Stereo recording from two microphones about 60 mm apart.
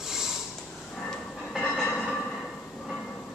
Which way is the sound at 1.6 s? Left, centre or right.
Left.